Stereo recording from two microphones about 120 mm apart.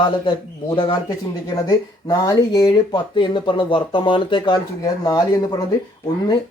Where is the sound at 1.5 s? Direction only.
30° left (ahead or behind).